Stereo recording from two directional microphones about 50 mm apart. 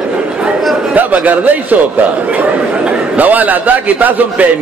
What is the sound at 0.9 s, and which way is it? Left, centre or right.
A man's voice, right.